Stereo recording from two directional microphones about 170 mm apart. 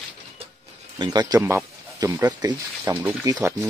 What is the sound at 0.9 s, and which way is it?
Speech, 25° right (ahead or behind).